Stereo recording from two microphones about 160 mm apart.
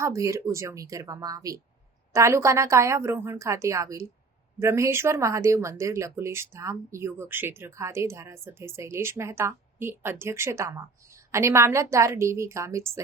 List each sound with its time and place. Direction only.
0.0 s speech: 20° right (ahead or behind)